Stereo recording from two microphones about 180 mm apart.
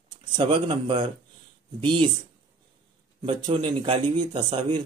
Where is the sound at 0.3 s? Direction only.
25° right (ahead or behind).